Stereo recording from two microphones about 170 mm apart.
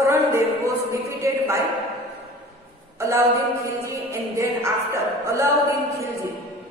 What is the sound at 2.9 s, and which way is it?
A woman's voice, 15° right (ahead or behind).